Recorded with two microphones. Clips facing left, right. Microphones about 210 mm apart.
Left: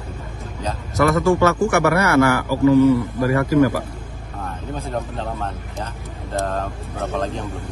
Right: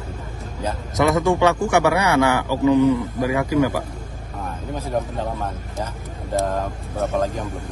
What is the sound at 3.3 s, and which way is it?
Speech, 10° right (ahead or behind).